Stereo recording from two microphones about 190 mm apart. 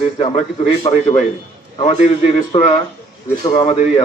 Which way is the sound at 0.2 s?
30° left (ahead or behind).